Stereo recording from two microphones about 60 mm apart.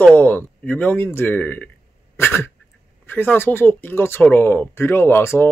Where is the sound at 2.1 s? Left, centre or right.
Left.